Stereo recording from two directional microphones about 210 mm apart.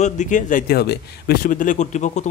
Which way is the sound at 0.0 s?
35° left (ahead or behind).